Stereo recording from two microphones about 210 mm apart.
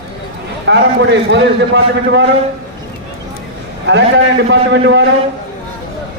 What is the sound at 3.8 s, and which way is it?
A man's voice, 55° right (ahead or behind).